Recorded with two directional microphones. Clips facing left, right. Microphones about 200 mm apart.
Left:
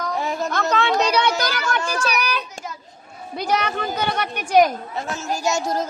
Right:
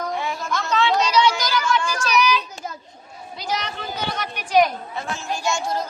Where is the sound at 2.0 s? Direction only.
55° left (ahead or behind).